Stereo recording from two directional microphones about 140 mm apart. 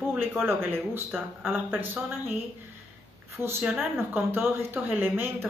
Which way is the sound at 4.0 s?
15° right (ahead or behind).